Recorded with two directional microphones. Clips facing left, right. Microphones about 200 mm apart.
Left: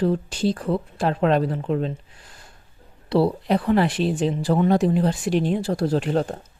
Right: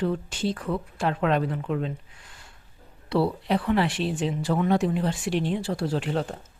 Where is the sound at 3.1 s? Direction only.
40° left (ahead or behind).